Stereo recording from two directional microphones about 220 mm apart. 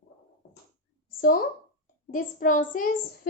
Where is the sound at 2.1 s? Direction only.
40° left (ahead or behind).